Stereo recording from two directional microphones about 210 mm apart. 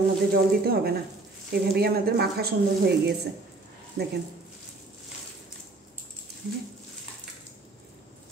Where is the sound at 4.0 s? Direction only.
50° right (ahead or behind).